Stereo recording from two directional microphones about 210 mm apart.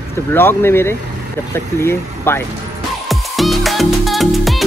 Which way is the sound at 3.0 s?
Centre (ahead or behind).